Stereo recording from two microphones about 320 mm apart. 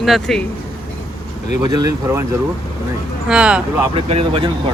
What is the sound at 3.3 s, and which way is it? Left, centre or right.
Speech, centre.